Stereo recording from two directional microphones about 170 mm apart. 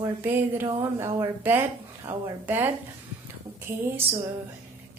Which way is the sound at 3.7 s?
15° right (ahead or behind).